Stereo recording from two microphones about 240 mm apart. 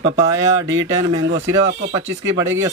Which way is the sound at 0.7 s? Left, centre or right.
Right.